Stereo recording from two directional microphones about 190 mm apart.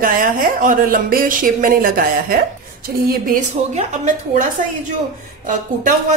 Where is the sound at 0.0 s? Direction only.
45° right (ahead or behind).